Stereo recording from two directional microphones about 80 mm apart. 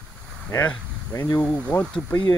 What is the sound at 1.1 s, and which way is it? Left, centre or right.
Speech, left.